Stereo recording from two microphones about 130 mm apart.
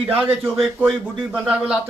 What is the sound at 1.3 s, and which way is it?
Speech, 5° right (ahead or behind).